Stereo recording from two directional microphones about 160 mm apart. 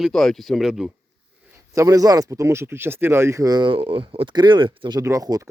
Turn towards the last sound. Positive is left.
turn(degrees=-20)  # may be behind; listen again after turning